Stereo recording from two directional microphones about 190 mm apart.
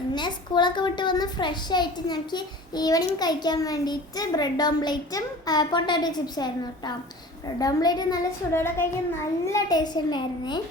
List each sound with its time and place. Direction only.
0.1 s a child's voice: 25° left (ahead or behind)